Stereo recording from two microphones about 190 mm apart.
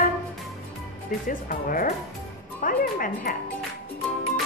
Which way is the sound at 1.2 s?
45° left (ahead or behind).